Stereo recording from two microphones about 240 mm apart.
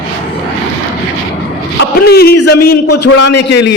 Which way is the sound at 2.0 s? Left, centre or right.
Left.